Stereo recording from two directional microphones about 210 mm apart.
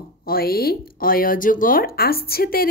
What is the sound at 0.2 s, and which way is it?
Speech, 45° left (ahead or behind).